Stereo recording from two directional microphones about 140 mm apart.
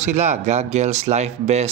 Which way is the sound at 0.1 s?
55° right (ahead or behind).